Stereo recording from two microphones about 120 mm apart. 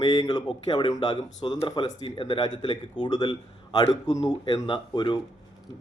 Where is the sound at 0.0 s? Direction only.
35° left (ahead or behind).